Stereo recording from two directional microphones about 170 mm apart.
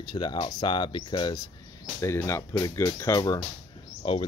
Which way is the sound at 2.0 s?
15° left (ahead or behind).